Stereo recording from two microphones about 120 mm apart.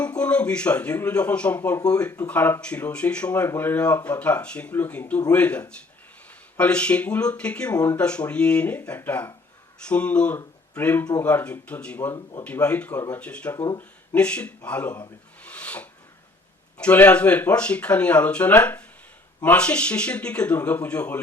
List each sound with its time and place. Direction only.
0.0 s speech: 10° left (ahead or behind)
12.1 s speech: 25° left (ahead or behind)
12.6 s speech: 10° left (ahead or behind)
15.4 s a sound: 10° left (ahead or behind)
16.7 s speech: 10° left (ahead or behind)